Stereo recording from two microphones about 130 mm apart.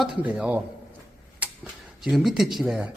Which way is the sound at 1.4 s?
10° right (ahead or behind).